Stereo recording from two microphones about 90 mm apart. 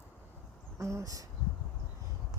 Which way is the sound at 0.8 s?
35° right (ahead or behind).